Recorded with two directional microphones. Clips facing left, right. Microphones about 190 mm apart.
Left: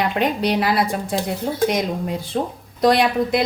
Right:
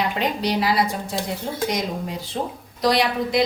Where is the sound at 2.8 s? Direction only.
55° left (ahead or behind).